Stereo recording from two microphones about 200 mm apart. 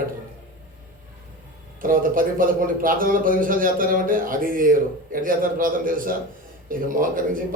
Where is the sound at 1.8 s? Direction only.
45° right (ahead or behind).